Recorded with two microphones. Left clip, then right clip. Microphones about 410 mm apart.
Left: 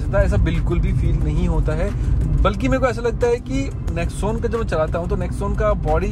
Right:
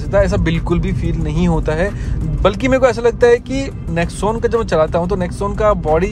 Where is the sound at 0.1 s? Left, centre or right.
Right.